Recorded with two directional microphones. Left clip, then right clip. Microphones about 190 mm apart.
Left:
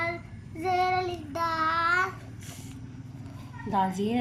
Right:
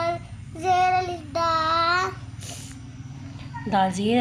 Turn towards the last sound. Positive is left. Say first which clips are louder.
# right 5 dB
turn(degrees=0)  # may be behind; listen again after turning